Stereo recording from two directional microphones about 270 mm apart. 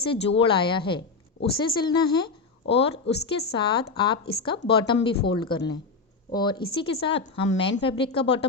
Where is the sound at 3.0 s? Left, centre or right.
Left.